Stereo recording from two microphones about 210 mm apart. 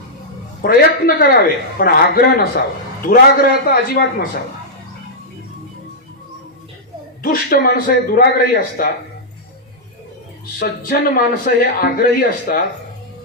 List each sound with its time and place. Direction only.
0.6 s a man's voice: 45° left (ahead or behind)
7.2 s a man's voice: 45° left (ahead or behind)
10.6 s a man's voice: 45° left (ahead or behind)